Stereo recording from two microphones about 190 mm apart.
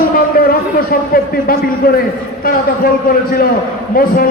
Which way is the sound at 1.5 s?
50° left (ahead or behind).